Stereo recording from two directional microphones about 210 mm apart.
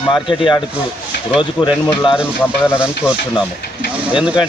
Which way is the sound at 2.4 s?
10° left (ahead or behind).